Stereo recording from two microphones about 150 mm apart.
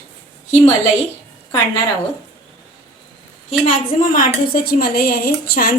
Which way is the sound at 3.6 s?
65° left (ahead or behind).